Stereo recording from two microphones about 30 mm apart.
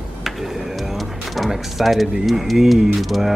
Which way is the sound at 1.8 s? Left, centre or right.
Centre.